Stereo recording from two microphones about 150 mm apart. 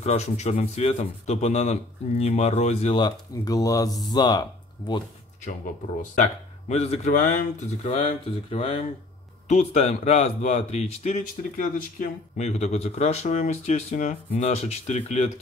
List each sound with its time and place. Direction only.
0.0 s speech: 45° left (ahead or behind)
3.0 s speech: 25° left (ahead or behind)
6.7 s speech: 45° left (ahead or behind)
7.8 s speech: 40° left (ahead or behind)
11.5 s speech: 65° left (ahead or behind); by 15.3 s 45° left (ahead or behind)